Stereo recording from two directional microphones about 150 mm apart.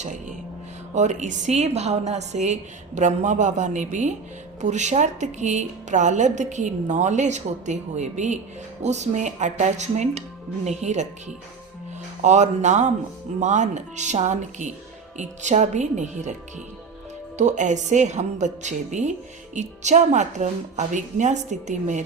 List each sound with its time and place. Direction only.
0.0 s a woman's voice: 55° right (ahead or behind)
12.2 s a woman's voice: 50° right (ahead or behind)
17.3 s a woman's voice: 55° right (ahead or behind)